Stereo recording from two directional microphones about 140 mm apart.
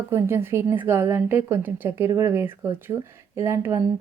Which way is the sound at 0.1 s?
15° right (ahead or behind).